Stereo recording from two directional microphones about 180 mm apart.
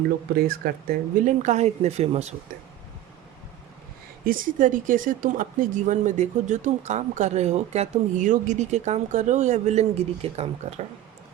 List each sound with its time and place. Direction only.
0.3 s speech: 55° right (ahead or behind); by 2.3 s 35° right (ahead or behind)
4.3 s speech: 50° right (ahead or behind)